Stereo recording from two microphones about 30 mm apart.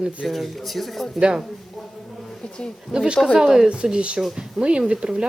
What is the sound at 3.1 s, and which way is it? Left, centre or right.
Speech, right.